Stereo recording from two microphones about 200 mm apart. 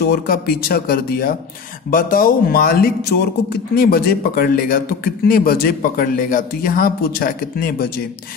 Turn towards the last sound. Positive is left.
turn(degrees=45)  # may be behind; listen again after turning